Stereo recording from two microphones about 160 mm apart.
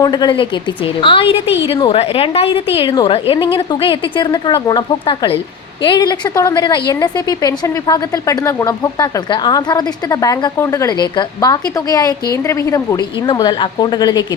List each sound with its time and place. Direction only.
0.0 s a woman's voice: 25° left (ahead or behind)